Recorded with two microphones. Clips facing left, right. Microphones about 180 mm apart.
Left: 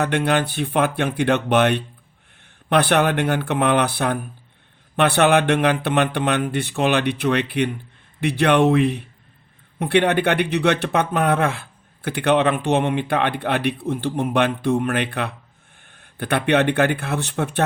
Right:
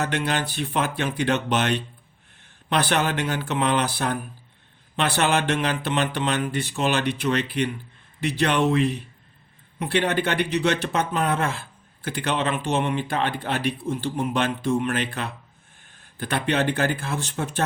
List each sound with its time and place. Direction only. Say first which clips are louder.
0.0 s a man's voice: left 5 dB; 55° left (ahead or behind)